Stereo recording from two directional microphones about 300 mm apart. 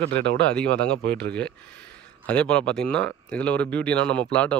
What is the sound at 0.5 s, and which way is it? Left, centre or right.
Speech, centre.